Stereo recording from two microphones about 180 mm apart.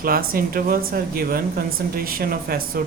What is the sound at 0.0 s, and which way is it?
Speech, 55° right (ahead or behind).